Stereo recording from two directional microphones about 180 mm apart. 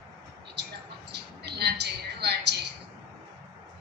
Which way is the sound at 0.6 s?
70° right (ahead or behind).